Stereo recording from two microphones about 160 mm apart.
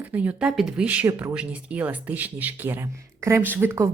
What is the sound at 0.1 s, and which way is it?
A woman's voice, 10° right (ahead or behind).